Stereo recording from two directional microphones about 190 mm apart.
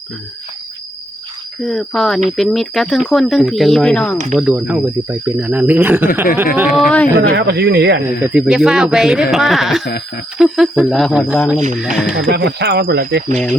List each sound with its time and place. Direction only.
1.6 s speech: centre (ahead or behind)
4.4 s speech: 5° right (ahead or behind)
6.7 s speech: 5° left (ahead or behind)
7.2 s speech: 65° right (ahead or behind)
8.2 s speech: 5° right (ahead or behind)
12.1 s speech: 60° right (ahead or behind)